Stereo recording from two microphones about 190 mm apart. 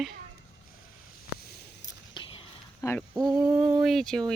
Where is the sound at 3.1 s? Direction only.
20° right (ahead or behind).